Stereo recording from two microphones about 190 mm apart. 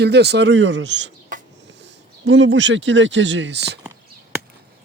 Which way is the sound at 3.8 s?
5° right (ahead or behind).